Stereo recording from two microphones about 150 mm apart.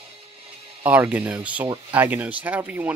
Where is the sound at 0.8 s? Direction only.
10° right (ahead or behind).